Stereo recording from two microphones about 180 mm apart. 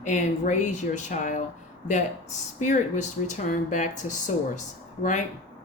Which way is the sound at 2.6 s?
40° left (ahead or behind).